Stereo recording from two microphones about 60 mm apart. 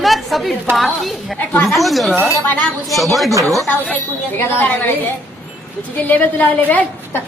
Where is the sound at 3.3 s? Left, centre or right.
Right.